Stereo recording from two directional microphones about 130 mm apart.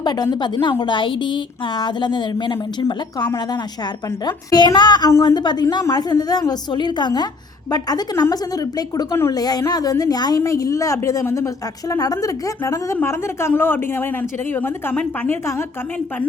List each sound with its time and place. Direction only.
0.0 s a woman's voice: 35° left (ahead or behind); by 15.4 s 15° left (ahead or behind)